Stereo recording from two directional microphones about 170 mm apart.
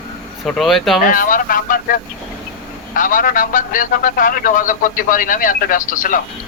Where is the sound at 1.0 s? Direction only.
55° left (ahead or behind).